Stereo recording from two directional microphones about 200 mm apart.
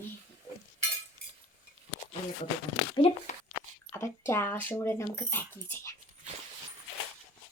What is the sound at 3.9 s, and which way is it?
Speech, 15° left (ahead or behind).